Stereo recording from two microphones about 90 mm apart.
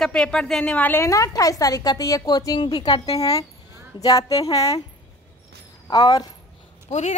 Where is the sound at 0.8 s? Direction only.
30° left (ahead or behind).